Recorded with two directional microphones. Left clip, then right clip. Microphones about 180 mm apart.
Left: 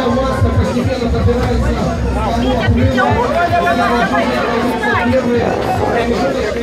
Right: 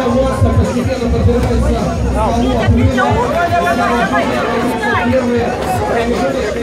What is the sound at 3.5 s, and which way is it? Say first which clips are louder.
Speech: even; 55° right (ahead or behind).